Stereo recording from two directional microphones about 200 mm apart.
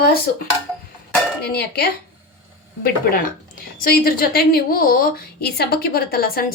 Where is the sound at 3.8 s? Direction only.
50° left (ahead or behind).